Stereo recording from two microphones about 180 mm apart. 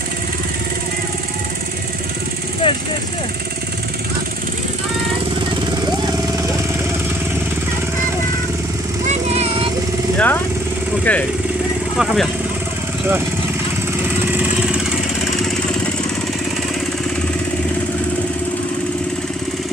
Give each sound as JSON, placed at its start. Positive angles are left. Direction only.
{"t": 2.6, "sound": "vehicle", "side_deg": 30}
{"t": 9.0, "sound": "vehicle", "side_deg": -35}
{"t": 10.1, "sound": "vehicle", "side_deg": 10}
{"t": 11.1, "sound": "speech", "side_deg": 10}